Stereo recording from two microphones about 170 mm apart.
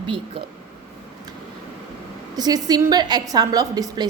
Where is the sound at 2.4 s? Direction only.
25° right (ahead or behind).